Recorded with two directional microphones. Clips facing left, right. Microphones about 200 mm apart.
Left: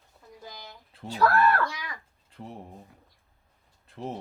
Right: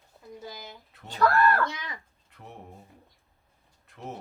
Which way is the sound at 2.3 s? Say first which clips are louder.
Left 8 dB; 30° left (ahead or behind).